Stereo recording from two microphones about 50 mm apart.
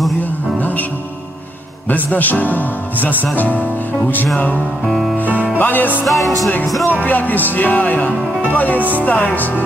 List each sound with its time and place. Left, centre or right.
0.6 s music: left
2.0 s speech: left
4.8 s music: centre
5.3 s music: right
5.6 s speech: left
6.0 s music: centre
7.1 s speech: left